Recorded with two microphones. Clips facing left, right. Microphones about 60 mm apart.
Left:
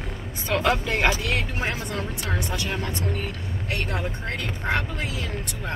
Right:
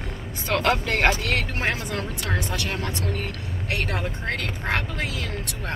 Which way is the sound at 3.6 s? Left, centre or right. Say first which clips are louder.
Right 1 dB; right.